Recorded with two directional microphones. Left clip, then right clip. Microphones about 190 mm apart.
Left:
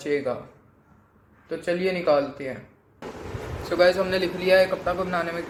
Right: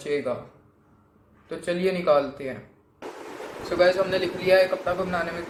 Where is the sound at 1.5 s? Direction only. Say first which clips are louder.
Left 1 dB; 30° left (ahead or behind).